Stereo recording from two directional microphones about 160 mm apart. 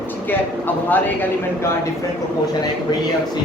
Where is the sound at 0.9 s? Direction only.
10° left (ahead or behind).